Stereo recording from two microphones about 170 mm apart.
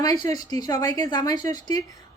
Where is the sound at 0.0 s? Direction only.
20° left (ahead or behind).